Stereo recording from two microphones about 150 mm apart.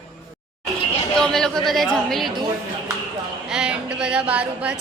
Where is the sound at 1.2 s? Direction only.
5° left (ahead or behind).